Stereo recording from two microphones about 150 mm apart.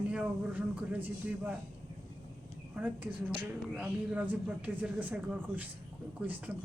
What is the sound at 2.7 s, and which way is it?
Speech, 10° right (ahead or behind).